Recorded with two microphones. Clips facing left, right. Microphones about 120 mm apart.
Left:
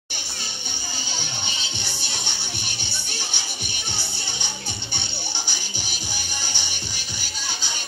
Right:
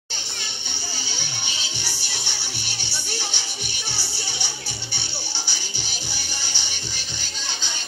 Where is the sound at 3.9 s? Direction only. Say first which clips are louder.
Even; 55° left (ahead or behind).